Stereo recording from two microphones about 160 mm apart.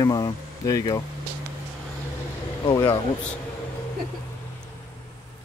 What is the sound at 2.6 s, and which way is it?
Speech, 30° left (ahead or behind).